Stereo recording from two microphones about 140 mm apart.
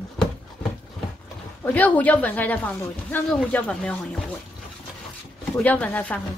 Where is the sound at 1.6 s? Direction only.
10° left (ahead or behind).